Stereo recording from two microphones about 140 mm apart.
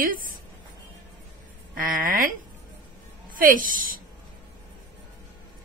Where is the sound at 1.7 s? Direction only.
90° right.